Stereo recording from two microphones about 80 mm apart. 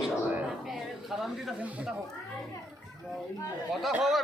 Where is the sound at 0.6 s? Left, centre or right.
Centre.